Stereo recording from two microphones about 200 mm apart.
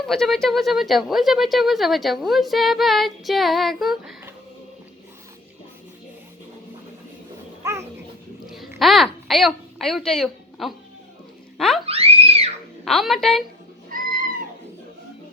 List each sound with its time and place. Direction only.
0.1 s speech: centre (ahead or behind)
7.6 s dog: 15° right (ahead or behind)
8.8 s speech: centre (ahead or behind)
11.5 s a sound: centre (ahead or behind)
11.9 s screaming: 30° right (ahead or behind)
12.8 s a woman's voice: centre (ahead or behind)
13.9 s cat: 45° right (ahead or behind)